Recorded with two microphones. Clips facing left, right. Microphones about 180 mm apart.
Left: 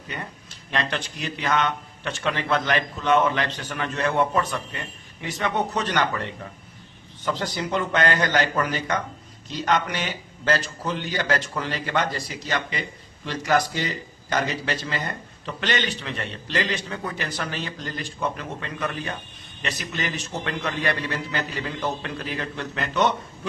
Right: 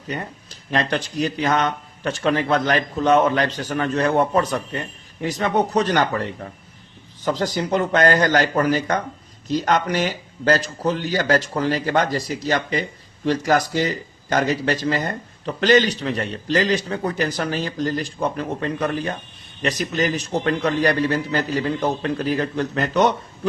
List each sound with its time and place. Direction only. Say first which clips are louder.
0.7 s a man's voice: right 5 dB; 35° right (ahead or behind)
7.3 s a man's voice: right 5 dB; 40° right (ahead or behind)